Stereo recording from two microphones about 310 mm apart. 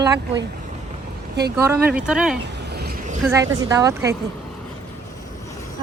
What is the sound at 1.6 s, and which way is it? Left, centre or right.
Speech, centre.